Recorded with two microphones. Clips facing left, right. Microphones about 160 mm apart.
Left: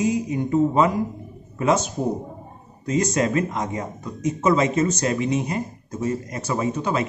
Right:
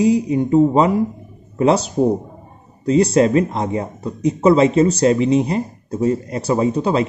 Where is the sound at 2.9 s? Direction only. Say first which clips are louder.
Right 8 dB; 30° right (ahead or behind).